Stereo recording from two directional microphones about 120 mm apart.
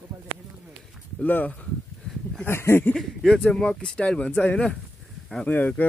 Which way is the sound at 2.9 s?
5° left (ahead or behind).